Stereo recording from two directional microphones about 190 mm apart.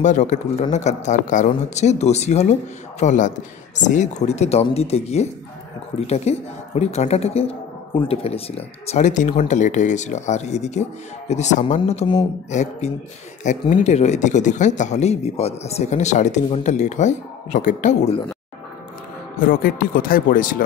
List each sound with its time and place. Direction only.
0.0 s speech: 40° left (ahead or behind)
19.4 s speech: 50° left (ahead or behind)